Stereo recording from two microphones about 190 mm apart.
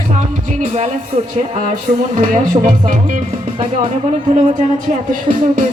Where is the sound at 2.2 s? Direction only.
45° right (ahead or behind).